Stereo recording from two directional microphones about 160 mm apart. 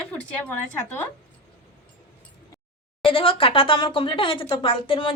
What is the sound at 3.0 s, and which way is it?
Speech, 35° left (ahead or behind).